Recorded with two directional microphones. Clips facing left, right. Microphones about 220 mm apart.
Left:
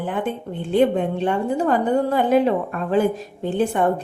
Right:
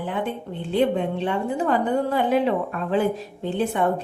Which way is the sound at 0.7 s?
45° left (ahead or behind).